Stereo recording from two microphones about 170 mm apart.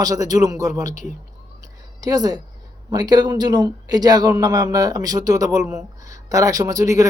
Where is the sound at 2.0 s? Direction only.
20° right (ahead or behind).